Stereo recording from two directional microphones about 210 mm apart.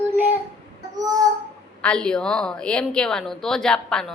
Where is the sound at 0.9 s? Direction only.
20° right (ahead or behind).